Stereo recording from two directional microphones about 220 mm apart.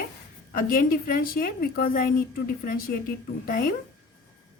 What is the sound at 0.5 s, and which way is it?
A woman's voice, 40° left (ahead or behind).